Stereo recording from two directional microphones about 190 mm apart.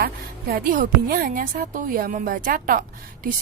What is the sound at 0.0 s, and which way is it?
A woman's voice, 50° right (ahead or behind).